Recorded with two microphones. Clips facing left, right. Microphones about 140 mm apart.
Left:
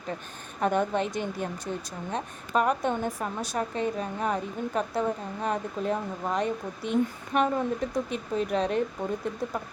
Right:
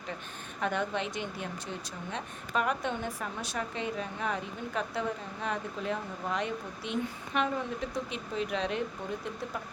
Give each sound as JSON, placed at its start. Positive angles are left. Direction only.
{"t": 0.6, "sound": "speech", "side_deg": 45}